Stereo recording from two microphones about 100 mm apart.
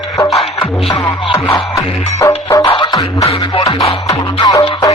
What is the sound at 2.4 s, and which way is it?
Music, 30° left (ahead or behind).